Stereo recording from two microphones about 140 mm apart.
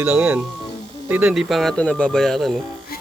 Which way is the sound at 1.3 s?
Centre (ahead or behind).